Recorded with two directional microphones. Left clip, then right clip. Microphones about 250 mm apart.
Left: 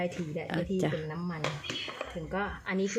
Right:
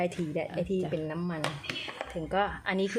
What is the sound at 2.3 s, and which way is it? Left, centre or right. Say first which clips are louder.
Speech: right 6 dB; right.